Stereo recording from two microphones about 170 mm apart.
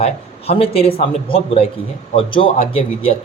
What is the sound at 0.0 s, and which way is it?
A man's voice, 35° left (ahead or behind).